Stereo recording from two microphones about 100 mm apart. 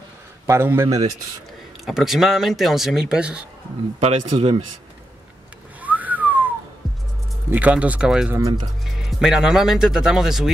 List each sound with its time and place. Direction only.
0.5 s a man's voice: 25° right (ahead or behind)
1.9 s speech: 5° right (ahead or behind)
4.0 s speech: 90° right
5.8 s whistling: 15° right (ahead or behind)
7.5 s speech: 15° right (ahead or behind)